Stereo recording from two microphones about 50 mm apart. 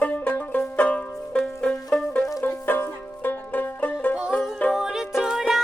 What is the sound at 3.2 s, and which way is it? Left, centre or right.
Banjo, left.